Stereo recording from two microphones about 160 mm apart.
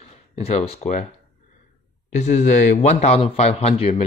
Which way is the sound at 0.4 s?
40° left (ahead or behind).